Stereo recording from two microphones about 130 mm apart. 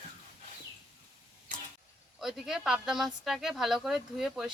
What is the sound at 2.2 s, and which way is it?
Speech, 5° right (ahead or behind).